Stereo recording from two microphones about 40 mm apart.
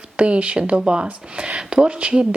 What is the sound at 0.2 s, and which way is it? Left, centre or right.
Speech, right.